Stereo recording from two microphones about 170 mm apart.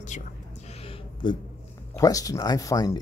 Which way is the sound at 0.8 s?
30° left (ahead or behind).